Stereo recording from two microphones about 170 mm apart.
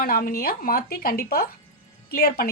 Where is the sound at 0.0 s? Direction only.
60° left (ahead or behind).